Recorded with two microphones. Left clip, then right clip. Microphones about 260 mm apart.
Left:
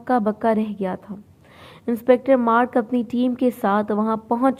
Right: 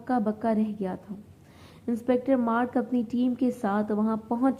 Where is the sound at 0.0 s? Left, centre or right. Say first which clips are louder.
Left 8 dB; left.